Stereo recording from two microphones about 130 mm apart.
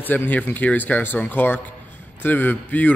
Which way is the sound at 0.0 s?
15° left (ahead or behind).